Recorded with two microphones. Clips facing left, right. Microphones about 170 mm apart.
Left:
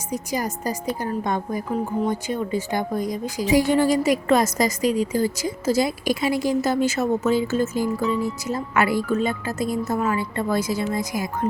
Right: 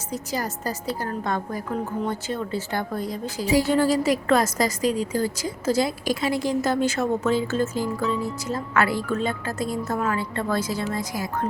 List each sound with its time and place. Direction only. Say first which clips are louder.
0.1 s a woman's voice: left 3 dB; 15° left (ahead or behind)